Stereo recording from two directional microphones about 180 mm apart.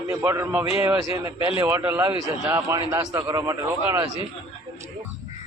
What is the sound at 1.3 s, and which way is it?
Speech, 30° left (ahead or behind).